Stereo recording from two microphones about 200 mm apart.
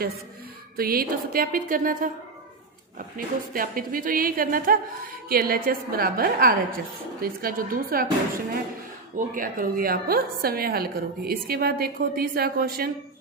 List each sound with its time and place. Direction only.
0.8 s a woman's voice: 45° right (ahead or behind)
9.1 s a woman's voice: 45° right (ahead or behind)